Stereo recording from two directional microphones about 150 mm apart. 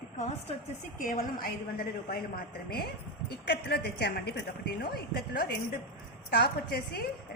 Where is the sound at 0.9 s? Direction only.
65° left (ahead or behind).